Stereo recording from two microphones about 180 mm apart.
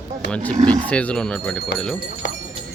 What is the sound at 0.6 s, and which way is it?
Speech, 40° right (ahead or behind).